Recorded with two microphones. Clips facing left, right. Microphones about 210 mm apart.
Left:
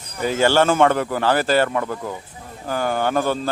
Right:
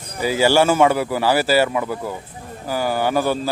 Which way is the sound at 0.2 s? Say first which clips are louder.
Right 1 dB; 5° right (ahead or behind).